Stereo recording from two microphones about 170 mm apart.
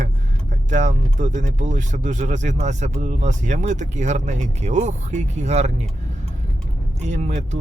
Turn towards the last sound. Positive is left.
turn(degrees=-45)  # may be behind; listen again after turning